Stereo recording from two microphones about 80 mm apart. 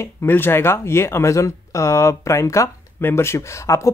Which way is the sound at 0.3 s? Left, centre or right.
Left.